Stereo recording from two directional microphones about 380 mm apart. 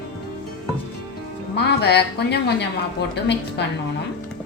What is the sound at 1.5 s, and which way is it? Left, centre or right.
A woman's voice, left.